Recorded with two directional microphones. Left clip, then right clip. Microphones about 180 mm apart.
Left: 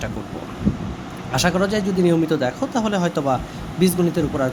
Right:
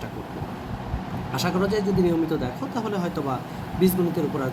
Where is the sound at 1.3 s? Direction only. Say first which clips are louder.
Left 5 dB; 45° left (ahead or behind).